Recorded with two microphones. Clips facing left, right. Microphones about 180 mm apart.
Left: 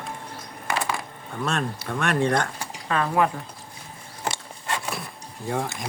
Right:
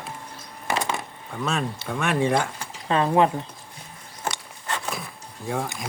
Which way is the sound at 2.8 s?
25° right (ahead or behind).